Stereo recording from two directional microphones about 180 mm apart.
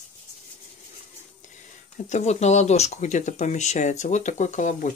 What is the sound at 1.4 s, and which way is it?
Speech, 40° left (ahead or behind).